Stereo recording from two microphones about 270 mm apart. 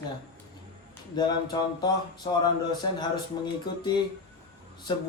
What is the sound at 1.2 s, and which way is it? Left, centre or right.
Speech, centre.